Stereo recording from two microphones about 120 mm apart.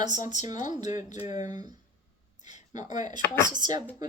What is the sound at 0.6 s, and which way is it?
Speech, 35° right (ahead or behind).